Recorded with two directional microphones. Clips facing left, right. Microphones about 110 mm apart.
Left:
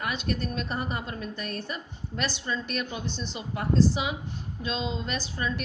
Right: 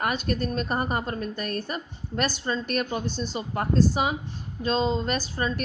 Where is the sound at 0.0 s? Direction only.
45° right (ahead or behind).